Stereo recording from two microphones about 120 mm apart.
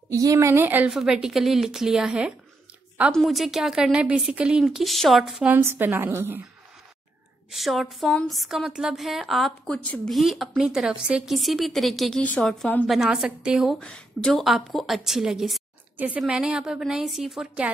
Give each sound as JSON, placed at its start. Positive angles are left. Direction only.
{"t": 0.1, "sound": "speech", "side_deg": -30}
{"t": 0.5, "sound": "a woman's voice", "side_deg": -15}
{"t": 5.5, "sound": "a woman's voice", "side_deg": -20}
{"t": 7.5, "sound": "a woman's voice", "side_deg": 0}
{"t": 13.7, "sound": "a woman's voice", "side_deg": 10}